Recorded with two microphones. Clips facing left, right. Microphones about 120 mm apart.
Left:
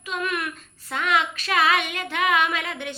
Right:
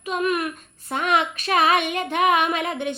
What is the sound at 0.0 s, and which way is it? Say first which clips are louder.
Child singing: right 5 dB; 25° right (ahead or behind).